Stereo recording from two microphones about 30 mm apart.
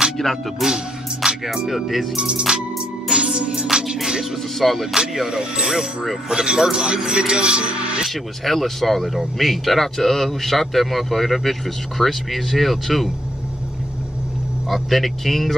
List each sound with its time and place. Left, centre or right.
0.6 s a man's voice: centre
2.1 s music: right
4.6 s a man's voice: centre
4.9 s speech: centre; by 8.0 s right
8.1 s a man's voice: centre
14.7 s a man's voice: centre